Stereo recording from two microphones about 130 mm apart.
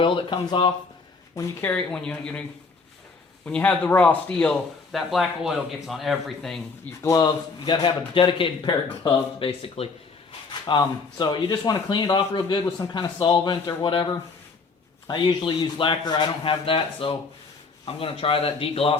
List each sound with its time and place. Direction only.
0.0 s speech: 40° left (ahead or behind)
1.7 s speech: 5° left (ahead or behind)
3.4 s speech: 10° left (ahead or behind)
4.9 s speech: centre (ahead or behind)
7.0 s speech: 25° left (ahead or behind); by 9.9 s 50° left (ahead or behind)
10.7 s speech: 35° left (ahead or behind)